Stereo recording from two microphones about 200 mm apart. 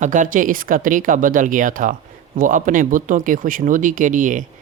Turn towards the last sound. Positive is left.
turn(degrees=-40)  # may be behind; listen again after turning